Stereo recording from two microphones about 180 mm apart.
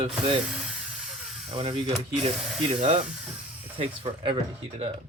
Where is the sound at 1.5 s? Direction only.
30° right (ahead or behind).